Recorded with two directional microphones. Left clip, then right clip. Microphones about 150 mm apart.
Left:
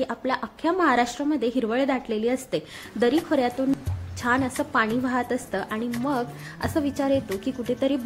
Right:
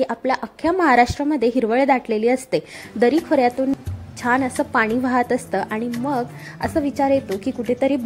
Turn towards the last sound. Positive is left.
turn(degrees=-25)  # may be behind; listen again after turning